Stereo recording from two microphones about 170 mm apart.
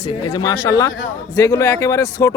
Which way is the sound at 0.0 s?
35° left (ahead or behind).